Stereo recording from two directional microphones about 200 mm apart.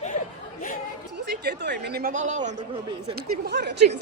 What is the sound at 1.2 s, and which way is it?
Speech, 60° right (ahead or behind).